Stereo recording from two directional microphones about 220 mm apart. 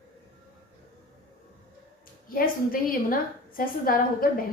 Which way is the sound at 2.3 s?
40° left (ahead or behind).